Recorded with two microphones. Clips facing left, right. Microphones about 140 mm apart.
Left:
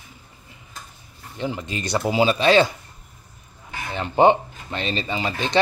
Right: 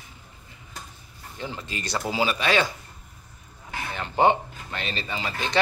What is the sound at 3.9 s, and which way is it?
Speech, 20° left (ahead or behind).